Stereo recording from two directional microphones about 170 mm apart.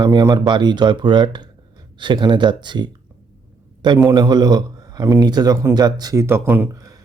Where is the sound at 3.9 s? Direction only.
20° right (ahead or behind).